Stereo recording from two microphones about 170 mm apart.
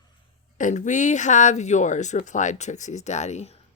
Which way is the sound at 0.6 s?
45° left (ahead or behind).